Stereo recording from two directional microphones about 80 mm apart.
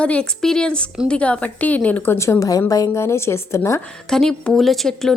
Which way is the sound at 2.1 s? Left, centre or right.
Left.